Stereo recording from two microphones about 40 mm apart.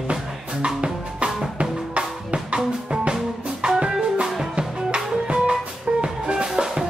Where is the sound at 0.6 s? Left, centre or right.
Right.